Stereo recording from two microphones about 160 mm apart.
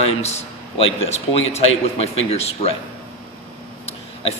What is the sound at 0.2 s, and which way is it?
A man's voice, 45° left (ahead or behind).